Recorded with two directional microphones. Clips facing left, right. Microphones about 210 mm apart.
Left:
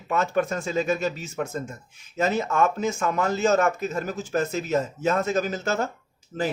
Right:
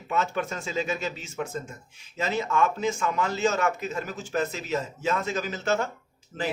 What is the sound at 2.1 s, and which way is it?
A man's voice, 45° left (ahead or behind).